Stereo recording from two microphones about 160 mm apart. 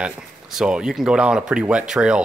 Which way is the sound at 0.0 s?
5° right (ahead or behind).